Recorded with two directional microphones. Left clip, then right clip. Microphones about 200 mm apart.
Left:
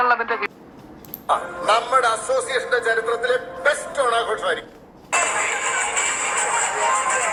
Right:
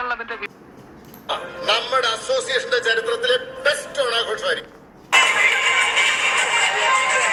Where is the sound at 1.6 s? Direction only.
20° right (ahead or behind).